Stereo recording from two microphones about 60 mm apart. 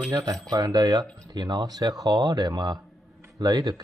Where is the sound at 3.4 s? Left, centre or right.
Right.